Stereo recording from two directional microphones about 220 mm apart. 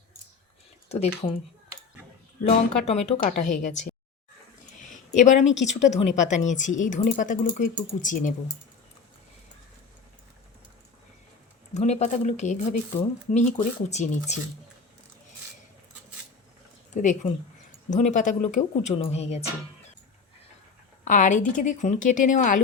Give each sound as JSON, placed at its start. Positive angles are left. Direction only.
{"t": 0.9, "sound": "speech", "side_deg": 30}
{"t": 2.4, "sound": "speech", "side_deg": 30}
{"t": 5.1, "sound": "speech", "side_deg": 35}
{"t": 11.7, "sound": "speech", "side_deg": 30}
{"t": 16.9, "sound": "speech", "side_deg": 35}
{"t": 21.0, "sound": "speech", "side_deg": 35}